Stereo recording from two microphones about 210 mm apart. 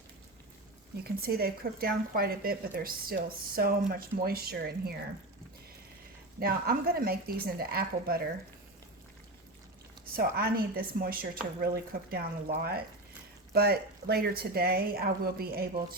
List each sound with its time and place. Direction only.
1.0 s speech: 45° right (ahead or behind)
6.4 s speech: 45° right (ahead or behind)
10.2 s speech: 45° right (ahead or behind)